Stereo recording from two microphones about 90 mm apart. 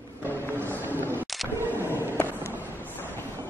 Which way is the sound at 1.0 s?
20° right (ahead or behind).